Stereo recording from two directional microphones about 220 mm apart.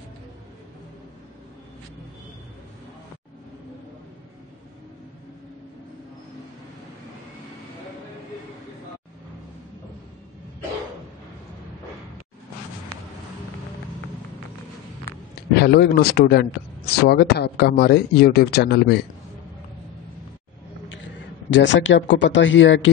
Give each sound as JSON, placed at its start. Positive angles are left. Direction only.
{"t": 15.5, "sound": "speech", "side_deg": 50}
{"t": 21.0, "sound": "a man's voice", "side_deg": 60}